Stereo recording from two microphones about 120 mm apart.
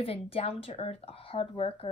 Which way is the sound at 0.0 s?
55° left (ahead or behind).